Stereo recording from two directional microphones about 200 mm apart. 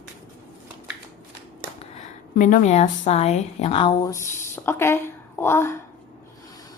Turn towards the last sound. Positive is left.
turn(degrees=10)  # may be behind; listen again after turning